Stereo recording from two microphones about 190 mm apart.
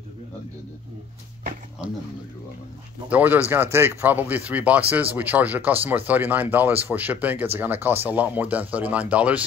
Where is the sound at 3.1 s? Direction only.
10° right (ahead or behind).